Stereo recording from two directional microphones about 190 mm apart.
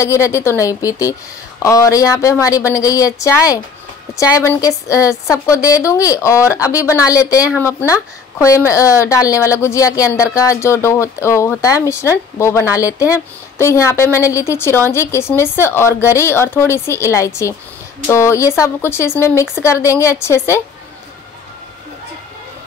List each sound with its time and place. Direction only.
0.0 s speech: 15° left (ahead or behind)